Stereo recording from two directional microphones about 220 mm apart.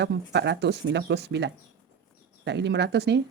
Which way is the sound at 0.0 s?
50° right (ahead or behind).